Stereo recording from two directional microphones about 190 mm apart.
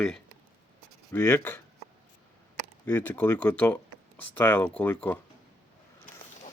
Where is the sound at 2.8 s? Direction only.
10° left (ahead or behind).